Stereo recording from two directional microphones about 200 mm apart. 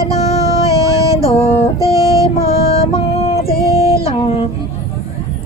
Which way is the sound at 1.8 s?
15° right (ahead or behind).